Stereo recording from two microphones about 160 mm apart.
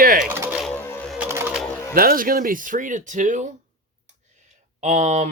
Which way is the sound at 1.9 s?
65° right (ahead or behind).